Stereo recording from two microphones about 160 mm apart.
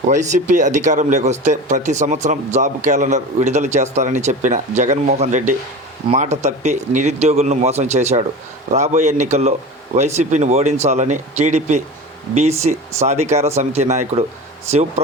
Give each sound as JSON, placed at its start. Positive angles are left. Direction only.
{"t": 0.1, "sound": "speech", "side_deg": -50}